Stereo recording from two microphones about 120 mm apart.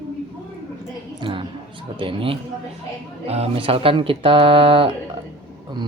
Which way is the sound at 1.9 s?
45° right (ahead or behind).